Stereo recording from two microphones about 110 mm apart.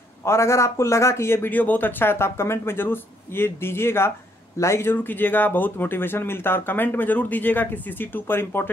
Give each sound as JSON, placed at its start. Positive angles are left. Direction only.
{"t": 0.2, "sound": "speech", "side_deg": 25}